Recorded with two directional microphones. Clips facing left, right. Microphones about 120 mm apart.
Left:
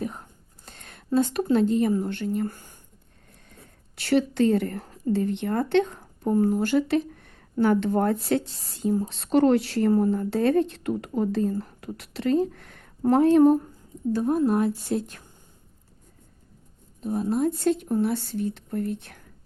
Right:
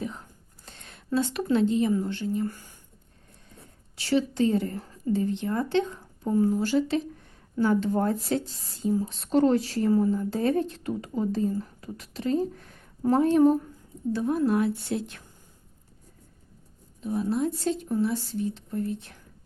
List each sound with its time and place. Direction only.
0.6 s a sound: 50° left (ahead or behind)
1.5 s a woman's voice: 45° left (ahead or behind)
2.0 s speech: 60° left (ahead or behind)
3.9 s speech: 60° left (ahead or behind)
9.0 s speech: 75° left (ahead or behind)
9.9 s speech: 60° left (ahead or behind); by 12.9 s 90° left
13.1 s speech: 70° left (ahead or behind)
14.1 s a woman's voice: 45° left (ahead or behind)
17.0 s a woman's voice: 45° left (ahead or behind); by 19.2 s 60° left (ahead or behind)